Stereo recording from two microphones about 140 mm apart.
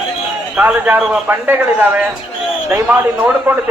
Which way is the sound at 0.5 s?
10° right (ahead or behind).